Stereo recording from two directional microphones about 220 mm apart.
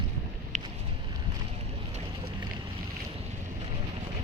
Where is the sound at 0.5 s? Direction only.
35° right (ahead or behind).